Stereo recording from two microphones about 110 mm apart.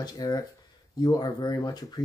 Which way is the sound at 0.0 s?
35° left (ahead or behind).